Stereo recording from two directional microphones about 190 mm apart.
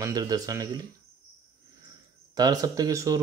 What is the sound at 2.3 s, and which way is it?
Speech, 20° right (ahead or behind).